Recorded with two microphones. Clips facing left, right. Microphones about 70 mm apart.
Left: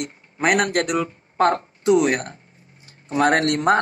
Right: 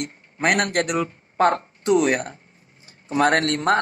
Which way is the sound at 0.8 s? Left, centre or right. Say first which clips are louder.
Left 1 dB; right.